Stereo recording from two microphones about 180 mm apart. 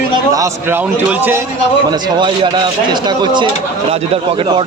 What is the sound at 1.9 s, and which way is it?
A man's voice, 25° right (ahead or behind).